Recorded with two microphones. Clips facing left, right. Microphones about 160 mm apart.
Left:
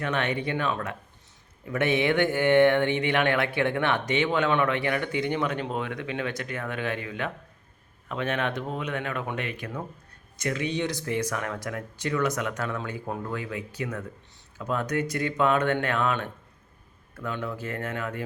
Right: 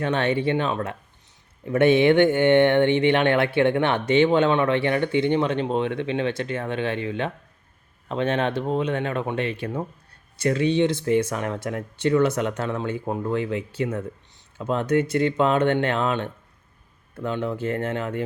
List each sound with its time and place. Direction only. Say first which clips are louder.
0.0 s speech: right 6 dB; 30° right (ahead or behind)